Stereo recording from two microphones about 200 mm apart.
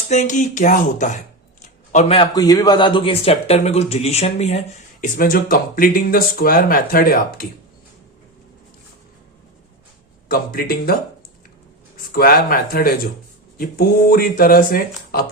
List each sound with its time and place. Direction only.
0.1 s speech: 35° left (ahead or behind)
10.2 s speech: 45° left (ahead or behind)
12.1 s speech: 45° left (ahead or behind)